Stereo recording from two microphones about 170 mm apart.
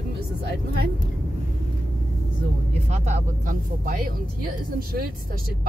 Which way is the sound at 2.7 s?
45° right (ahead or behind).